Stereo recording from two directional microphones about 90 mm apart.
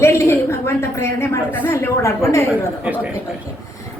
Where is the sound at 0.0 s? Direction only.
30° left (ahead or behind).